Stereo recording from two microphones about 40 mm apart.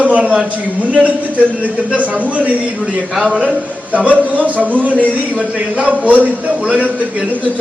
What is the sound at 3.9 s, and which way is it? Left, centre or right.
A man's voice, right.